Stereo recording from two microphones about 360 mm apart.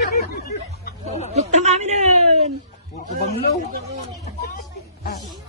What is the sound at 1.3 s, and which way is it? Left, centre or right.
Speech, centre.